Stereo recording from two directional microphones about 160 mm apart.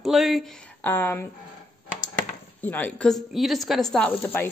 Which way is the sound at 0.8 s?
10° left (ahead or behind).